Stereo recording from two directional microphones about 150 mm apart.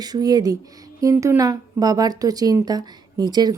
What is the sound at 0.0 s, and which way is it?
Speech, 25° right (ahead or behind).